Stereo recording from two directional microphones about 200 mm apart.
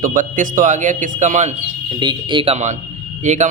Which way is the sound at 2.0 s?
20° right (ahead or behind).